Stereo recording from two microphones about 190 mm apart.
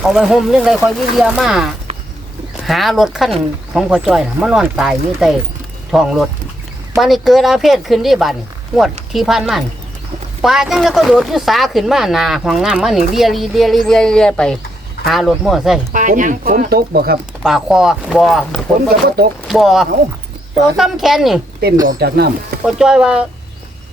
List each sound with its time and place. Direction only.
0.1 s speech: centre (ahead or behind)
15.9 s speech: 45° right (ahead or behind)
17.4 s speech: 5° right (ahead or behind)
21.8 s speech: 55° right (ahead or behind)
22.6 s speech: 5° right (ahead or behind)